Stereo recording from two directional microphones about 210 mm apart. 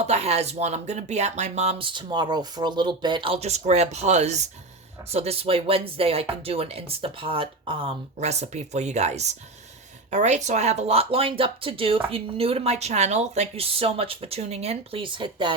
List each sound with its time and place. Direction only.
0.0 s speech: 30° right (ahead or behind)